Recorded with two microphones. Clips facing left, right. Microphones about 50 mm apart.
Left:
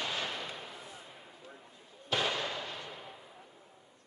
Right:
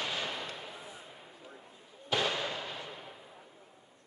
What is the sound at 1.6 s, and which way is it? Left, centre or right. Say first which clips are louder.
Fireworks: right 1 dB; centre.